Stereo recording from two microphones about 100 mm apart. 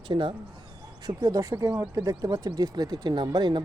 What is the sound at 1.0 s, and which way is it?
Speech, 40° right (ahead or behind).